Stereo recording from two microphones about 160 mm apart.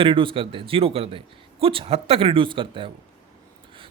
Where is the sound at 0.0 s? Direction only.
30° right (ahead or behind).